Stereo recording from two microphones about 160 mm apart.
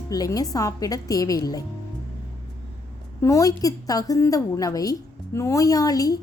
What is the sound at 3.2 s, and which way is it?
A woman's voice, 20° left (ahead or behind).